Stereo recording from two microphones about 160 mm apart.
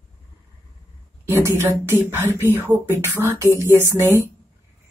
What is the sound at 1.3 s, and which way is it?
Speech, 15° right (ahead or behind).